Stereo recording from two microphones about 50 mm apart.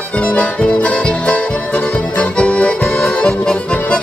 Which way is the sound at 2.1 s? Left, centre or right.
Left.